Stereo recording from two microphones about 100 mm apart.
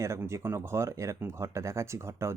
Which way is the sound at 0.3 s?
30° right (ahead or behind).